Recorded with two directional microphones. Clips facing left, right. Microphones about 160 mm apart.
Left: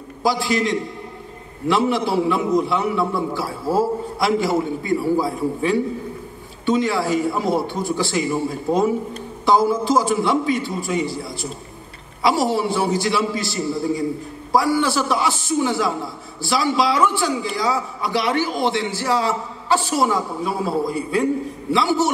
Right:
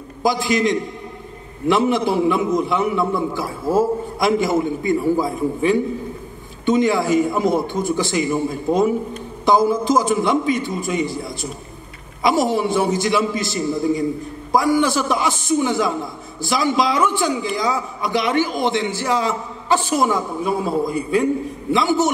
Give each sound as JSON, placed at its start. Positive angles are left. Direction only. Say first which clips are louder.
{"t": 0.2, "sound": "a man's voice", "louder": "right 2 dB", "side_deg": -20}